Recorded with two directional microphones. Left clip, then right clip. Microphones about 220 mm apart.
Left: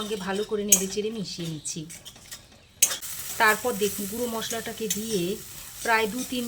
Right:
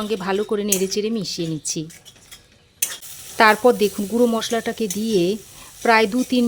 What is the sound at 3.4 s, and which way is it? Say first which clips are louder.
Speech: right 8 dB; 45° right (ahead or behind).